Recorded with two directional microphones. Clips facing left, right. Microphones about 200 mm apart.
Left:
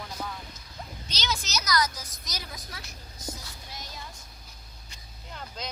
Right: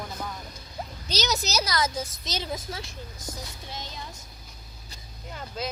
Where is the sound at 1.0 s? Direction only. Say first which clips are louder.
Right 6 dB; 40° right (ahead or behind).